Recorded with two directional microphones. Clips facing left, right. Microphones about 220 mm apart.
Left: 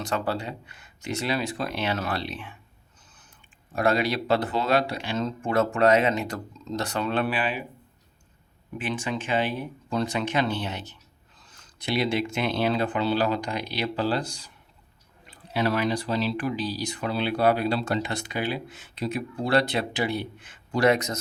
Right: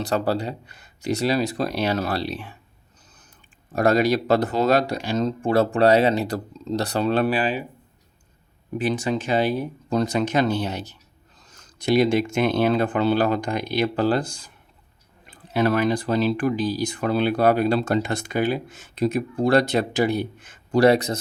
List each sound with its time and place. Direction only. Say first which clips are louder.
0.0 s speech: right 5 dB; 35° right (ahead or behind)
3.7 s speech: right 5 dB; 40° right (ahead or behind)
8.8 s speech: right 6 dB; 40° right (ahead or behind)